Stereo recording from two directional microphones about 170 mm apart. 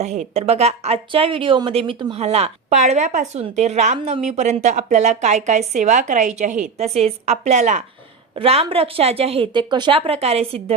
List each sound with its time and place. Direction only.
0.0 s speech: 40° right (ahead or behind)